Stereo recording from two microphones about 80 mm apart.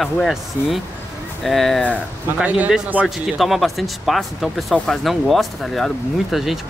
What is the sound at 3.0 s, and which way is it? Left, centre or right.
Speech, centre.